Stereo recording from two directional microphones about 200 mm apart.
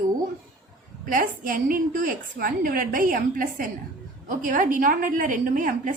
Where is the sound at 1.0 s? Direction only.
45° right (ahead or behind).